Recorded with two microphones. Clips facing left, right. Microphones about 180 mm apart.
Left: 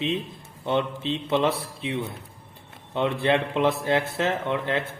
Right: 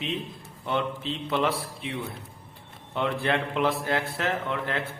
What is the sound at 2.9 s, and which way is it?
Speech, 20° left (ahead or behind).